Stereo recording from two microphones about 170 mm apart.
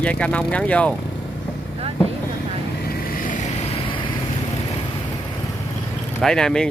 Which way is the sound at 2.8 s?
50° left (ahead or behind).